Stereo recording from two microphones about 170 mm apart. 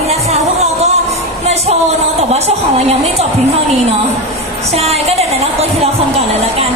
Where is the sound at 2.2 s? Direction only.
40° right (ahead or behind).